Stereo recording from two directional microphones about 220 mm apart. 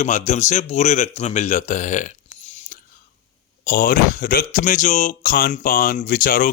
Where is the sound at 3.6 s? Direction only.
40° left (ahead or behind).